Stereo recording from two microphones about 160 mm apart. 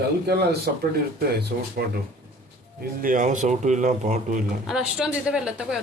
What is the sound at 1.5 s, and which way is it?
Speech, 65° right (ahead or behind).